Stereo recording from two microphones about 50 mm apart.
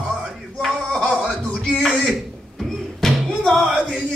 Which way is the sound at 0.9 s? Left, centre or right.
Centre.